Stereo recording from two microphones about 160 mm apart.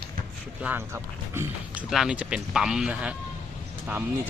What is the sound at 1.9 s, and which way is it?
Speech, 5° right (ahead or behind).